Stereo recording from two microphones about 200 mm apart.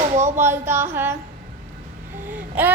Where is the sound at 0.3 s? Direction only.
10° right (ahead or behind).